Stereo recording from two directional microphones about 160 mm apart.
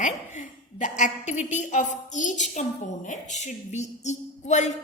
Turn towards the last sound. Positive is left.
turn(degrees=45)  # may be behind; listen again after turning